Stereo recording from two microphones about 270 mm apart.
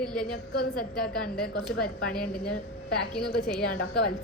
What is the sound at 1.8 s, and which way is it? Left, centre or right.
Speech, left.